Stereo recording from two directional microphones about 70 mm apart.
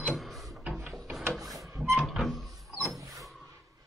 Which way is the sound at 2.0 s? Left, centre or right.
Centre.